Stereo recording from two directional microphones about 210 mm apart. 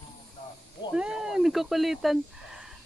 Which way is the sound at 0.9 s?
5° right (ahead or behind).